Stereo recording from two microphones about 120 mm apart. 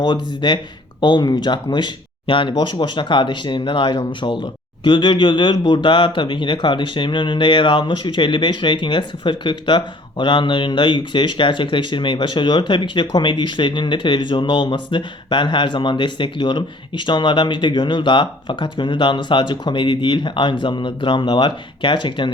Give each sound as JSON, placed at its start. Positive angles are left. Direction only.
{"t": 0.0, "sound": "speech", "side_deg": 40}